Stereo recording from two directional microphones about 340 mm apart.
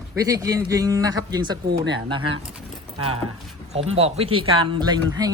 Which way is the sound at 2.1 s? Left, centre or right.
Centre.